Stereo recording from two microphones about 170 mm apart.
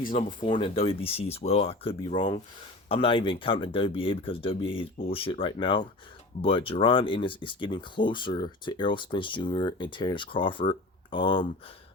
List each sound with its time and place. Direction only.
0.4 s speech: 35° left (ahead or behind)